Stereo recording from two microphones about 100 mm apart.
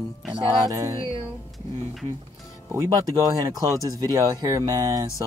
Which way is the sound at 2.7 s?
35° right (ahead or behind).